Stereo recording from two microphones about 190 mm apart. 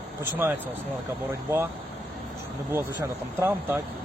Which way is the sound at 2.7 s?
15° right (ahead or behind).